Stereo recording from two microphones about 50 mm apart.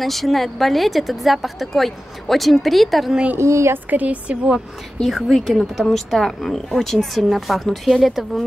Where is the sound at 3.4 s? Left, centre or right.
Right.